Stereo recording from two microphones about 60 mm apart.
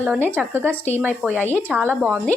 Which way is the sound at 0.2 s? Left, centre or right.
Right.